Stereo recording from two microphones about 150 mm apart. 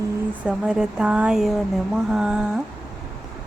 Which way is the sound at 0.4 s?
5° right (ahead or behind).